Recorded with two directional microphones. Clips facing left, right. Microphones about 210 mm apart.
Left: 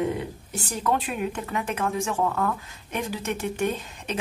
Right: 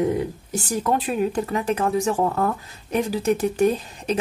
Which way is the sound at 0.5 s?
35° right (ahead or behind).